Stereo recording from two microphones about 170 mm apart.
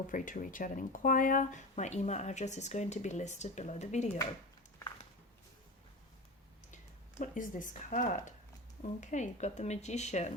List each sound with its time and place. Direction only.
0.1 s speech: 50° left (ahead or behind)
7.2 s speech: 50° left (ahead or behind)